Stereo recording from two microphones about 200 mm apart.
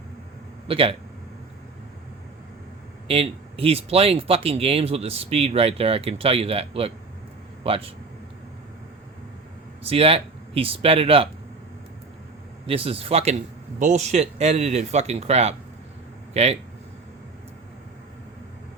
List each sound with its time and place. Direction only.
0.7 s speech: 25° right (ahead or behind)
3.1 s speech: 30° right (ahead or behind)
9.8 s speech: 30° right (ahead or behind)
12.6 s speech: 30° right (ahead or behind)